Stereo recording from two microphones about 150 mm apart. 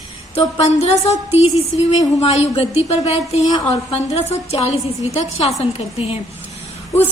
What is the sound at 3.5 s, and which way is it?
Speech, 25° left (ahead or behind).